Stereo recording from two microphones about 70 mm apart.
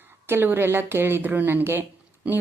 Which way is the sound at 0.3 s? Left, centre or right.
Right.